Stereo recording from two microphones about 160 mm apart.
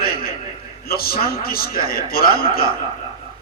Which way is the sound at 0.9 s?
70° left (ahead or behind).